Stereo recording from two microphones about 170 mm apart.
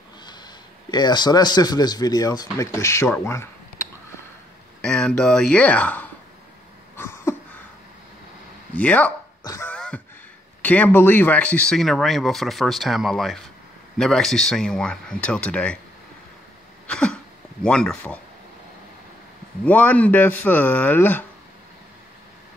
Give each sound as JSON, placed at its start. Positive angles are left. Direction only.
{"t": 0.9, "sound": "speech", "side_deg": 25}
{"t": 4.8, "sound": "speech", "side_deg": 5}
{"t": 7.0, "sound": "a sound", "side_deg": 15}
{"t": 8.7, "sound": "speech", "side_deg": 10}
{"t": 9.4, "sound": "beatboxing", "side_deg": 15}
{"t": 9.8, "sound": "beatboxing", "side_deg": 5}
{"t": 10.6, "sound": "speech", "side_deg": 10}
{"t": 16.8, "sound": "a sound", "side_deg": 5}
{"t": 19.6, "sound": "speech", "side_deg": 10}